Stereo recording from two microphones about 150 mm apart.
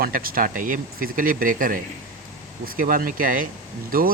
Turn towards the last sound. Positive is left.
turn(degrees=-75)  # may be behind; listen again after turning